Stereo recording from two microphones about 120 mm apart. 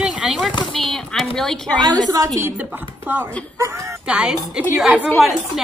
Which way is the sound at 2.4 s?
20° right (ahead or behind).